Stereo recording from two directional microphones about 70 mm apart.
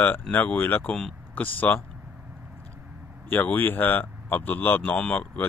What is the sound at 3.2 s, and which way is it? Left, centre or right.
Speech, left.